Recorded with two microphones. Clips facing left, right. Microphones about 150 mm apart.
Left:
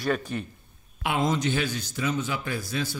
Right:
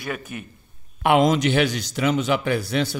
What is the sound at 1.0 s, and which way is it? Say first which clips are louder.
A man's voice: right 8 dB; 80° right.